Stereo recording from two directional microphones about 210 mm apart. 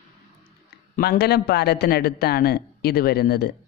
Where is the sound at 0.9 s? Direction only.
50° left (ahead or behind).